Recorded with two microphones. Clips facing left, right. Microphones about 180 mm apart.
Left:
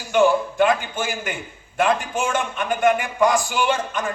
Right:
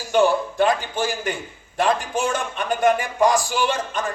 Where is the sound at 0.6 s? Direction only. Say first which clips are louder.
Even; 35° right (ahead or behind).